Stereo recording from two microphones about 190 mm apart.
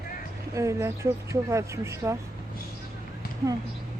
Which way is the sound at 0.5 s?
15° right (ahead or behind).